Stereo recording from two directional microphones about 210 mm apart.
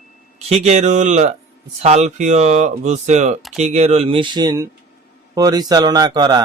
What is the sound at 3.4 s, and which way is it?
Speech, centre (ahead or behind).